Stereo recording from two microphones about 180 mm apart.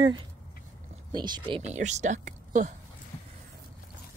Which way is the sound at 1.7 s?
40° right (ahead or behind).